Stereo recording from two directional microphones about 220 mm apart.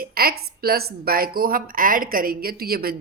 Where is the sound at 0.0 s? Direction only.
45° right (ahead or behind).